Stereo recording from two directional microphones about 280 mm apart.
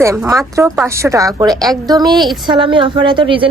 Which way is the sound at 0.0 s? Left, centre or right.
Centre.